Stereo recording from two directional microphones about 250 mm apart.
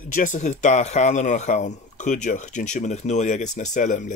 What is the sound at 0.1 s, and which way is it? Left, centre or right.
Speech, left.